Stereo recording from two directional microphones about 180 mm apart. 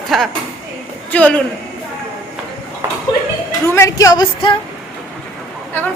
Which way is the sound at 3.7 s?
15° left (ahead or behind).